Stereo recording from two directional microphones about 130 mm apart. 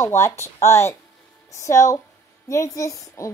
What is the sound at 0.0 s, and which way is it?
A child's voice, 20° left (ahead or behind).